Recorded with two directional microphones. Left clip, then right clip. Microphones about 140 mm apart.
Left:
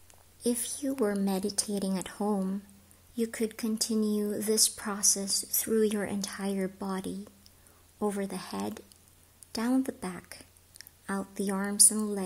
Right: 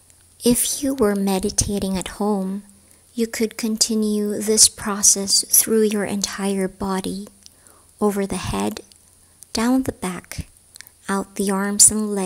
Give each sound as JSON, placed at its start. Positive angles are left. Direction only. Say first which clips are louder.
{"t": 0.4, "sound": "speech", "louder": "right 12 dB", "side_deg": -45}
{"t": 1.1, "sound": "speech", "louder": "right 10 dB", "side_deg": -30}